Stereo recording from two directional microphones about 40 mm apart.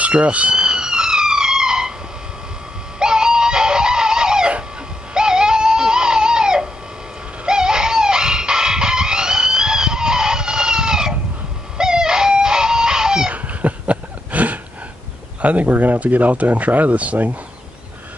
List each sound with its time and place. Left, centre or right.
0.0 s speech: right
0.6 s police car: centre
3.0 s music: centre
5.1 s a sound: centre
7.4 s chicken: centre
13.3 s a sound: right
15.4 s speech: right